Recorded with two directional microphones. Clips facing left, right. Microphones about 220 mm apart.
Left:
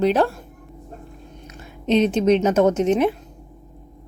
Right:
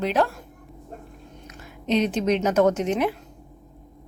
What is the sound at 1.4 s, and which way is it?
A woman's voice, 25° left (ahead or behind).